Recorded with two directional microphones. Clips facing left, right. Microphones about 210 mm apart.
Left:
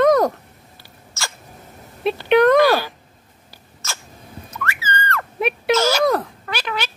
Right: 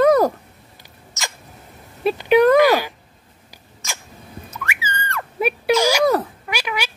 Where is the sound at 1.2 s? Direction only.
20° right (ahead or behind).